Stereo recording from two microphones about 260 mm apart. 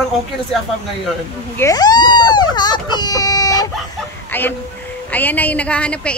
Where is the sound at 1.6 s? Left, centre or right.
Centre.